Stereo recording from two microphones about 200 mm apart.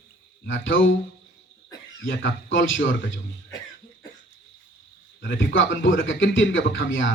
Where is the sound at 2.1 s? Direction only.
70° left (ahead or behind).